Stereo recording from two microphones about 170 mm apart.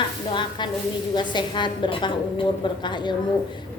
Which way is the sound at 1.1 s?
25° left (ahead or behind).